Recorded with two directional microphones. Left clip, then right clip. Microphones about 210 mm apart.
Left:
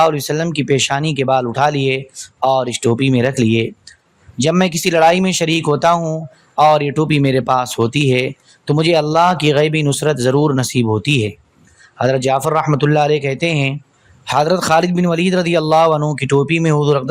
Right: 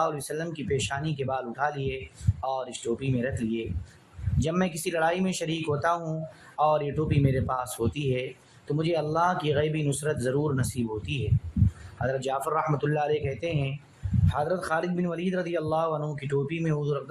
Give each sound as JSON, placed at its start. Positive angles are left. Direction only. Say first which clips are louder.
{"t": 0.0, "sound": "speech", "louder": "left 14 dB", "side_deg": 40}